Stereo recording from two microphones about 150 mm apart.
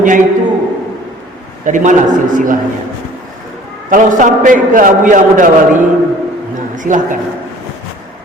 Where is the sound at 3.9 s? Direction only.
60° right (ahead or behind).